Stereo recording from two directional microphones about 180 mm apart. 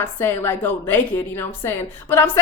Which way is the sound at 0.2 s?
15° left (ahead or behind).